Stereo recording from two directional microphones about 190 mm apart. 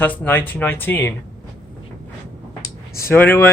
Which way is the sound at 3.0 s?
10° left (ahead or behind).